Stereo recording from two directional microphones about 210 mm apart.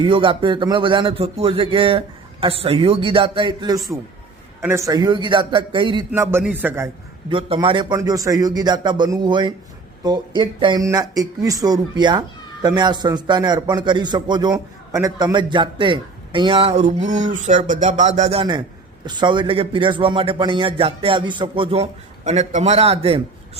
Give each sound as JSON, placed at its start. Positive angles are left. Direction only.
{"t": 0.0, "sound": "a man's voice", "side_deg": -25}
{"t": 6.1, "sound": "a man's voice", "side_deg": -10}
{"t": 7.3, "sound": "a man's voice", "side_deg": -25}